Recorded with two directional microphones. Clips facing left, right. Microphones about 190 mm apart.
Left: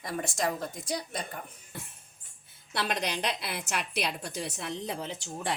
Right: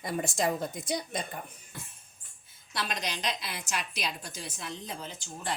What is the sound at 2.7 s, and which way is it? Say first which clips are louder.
A woman's voice: left 4 dB; 60° left (ahead or behind).